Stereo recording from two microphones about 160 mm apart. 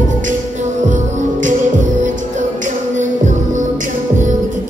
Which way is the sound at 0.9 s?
55° right (ahead or behind).